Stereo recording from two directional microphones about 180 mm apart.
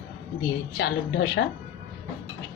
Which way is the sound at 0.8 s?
70° left (ahead or behind).